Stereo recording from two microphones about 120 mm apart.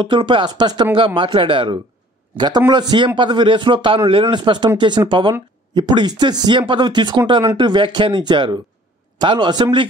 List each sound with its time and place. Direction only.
0.0 s a man's voice: 45° right (ahead or behind)